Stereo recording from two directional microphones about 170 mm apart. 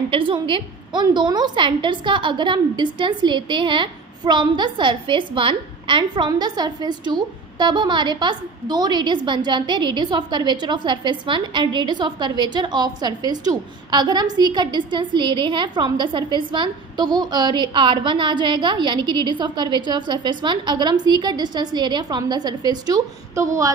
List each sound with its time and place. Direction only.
0.1 s a woman's voice: 30° right (ahead or behind)